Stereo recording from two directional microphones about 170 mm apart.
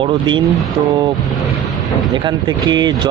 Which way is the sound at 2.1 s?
25° right (ahead or behind).